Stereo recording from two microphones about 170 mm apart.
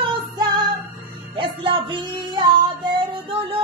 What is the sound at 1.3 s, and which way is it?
Music, 30° right (ahead or behind).